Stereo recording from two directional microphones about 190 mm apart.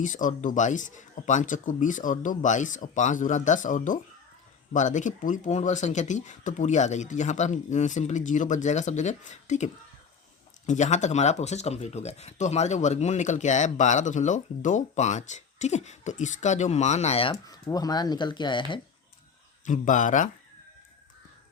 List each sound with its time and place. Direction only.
0.0 s speech: 45° left (ahead or behind)
17.4 s speech: 20° left (ahead or behind)
19.6 s speech: 40° left (ahead or behind)